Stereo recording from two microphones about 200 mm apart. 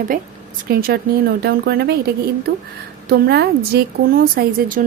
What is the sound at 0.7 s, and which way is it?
A woman's voice, 50° right (ahead or behind).